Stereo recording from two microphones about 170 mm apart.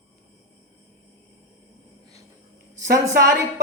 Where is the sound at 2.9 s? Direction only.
20° right (ahead or behind).